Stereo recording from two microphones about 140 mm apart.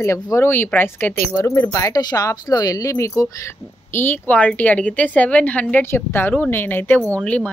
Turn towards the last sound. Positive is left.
turn(degrees=10)  # may be behind; listen again after turning